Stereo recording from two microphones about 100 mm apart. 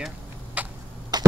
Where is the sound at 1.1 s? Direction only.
45° right (ahead or behind).